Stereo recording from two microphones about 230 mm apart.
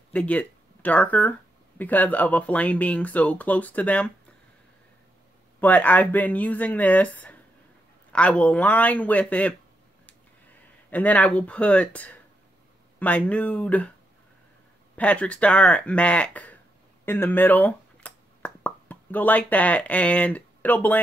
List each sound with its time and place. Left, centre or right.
0.1 s speech: centre
5.6 s speech: centre
10.9 s speech: centre
15.0 s speech: centre